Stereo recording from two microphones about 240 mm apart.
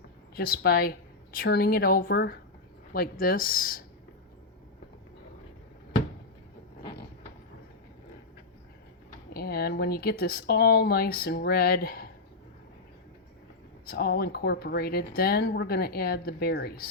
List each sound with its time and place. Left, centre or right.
0.3 s speech: left
9.3 s speech: left
13.9 s speech: left